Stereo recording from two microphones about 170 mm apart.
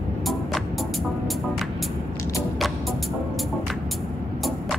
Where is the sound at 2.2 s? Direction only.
20° left (ahead or behind).